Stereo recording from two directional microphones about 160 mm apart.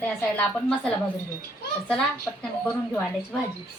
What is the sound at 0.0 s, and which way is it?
Speech, 10° left (ahead or behind).